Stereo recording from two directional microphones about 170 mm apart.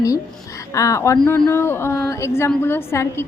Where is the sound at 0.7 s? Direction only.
20° left (ahead or behind).